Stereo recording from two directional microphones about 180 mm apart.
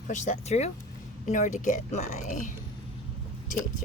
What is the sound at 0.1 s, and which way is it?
Speech, 40° left (ahead or behind).